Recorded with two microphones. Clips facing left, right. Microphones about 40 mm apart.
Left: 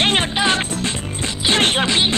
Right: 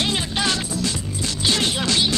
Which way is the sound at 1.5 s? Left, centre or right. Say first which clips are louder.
Left 8 dB; left.